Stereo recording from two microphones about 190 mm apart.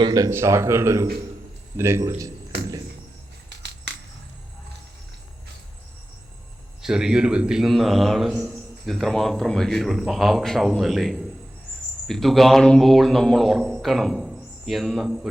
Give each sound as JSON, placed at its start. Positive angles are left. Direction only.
{"t": 0.0, "sound": "speech", "side_deg": -20}
{"t": 3.5, "sound": "a sound", "side_deg": -65}
{"t": 6.8, "sound": "speech", "side_deg": -5}